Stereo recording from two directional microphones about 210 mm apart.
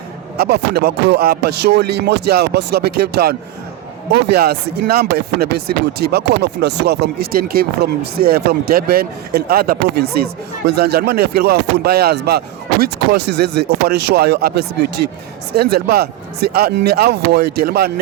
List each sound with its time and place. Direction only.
0.3 s speech: 50° right (ahead or behind)